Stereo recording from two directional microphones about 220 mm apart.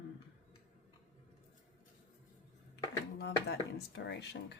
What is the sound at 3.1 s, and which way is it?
A woman's voice, 50° left (ahead or behind).